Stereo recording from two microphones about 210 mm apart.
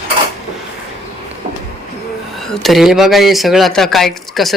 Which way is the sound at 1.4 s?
40° right (ahead or behind).